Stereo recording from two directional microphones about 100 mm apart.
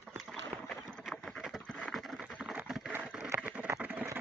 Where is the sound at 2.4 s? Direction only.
15° right (ahead or behind).